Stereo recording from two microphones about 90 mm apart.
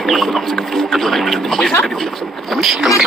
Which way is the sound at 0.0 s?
Centre (ahead or behind).